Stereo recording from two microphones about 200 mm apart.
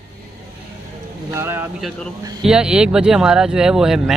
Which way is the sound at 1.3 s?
10° right (ahead or behind).